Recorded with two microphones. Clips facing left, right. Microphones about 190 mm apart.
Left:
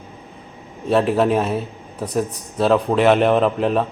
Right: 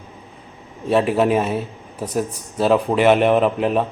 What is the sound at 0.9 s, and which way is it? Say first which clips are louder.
Speech: even; centre (ahead or behind).